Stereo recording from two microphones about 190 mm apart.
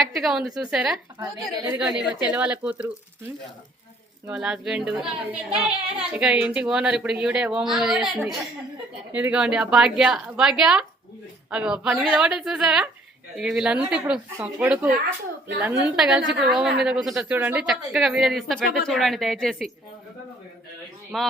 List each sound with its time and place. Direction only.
0.0 s a woman's voice: centre (ahead or behind)
4.3 s a woman's voice: 5° right (ahead or behind)
21.1 s a woman's voice: centre (ahead or behind)